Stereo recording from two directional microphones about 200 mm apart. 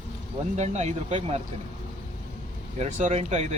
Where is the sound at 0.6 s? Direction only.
35° right (ahead or behind).